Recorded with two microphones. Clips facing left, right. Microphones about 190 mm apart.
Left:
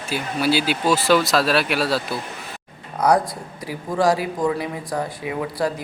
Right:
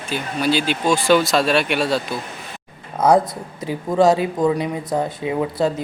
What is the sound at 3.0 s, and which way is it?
Speech, 25° right (ahead or behind).